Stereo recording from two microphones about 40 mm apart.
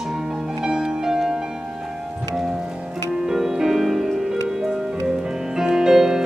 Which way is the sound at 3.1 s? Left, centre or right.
Centre.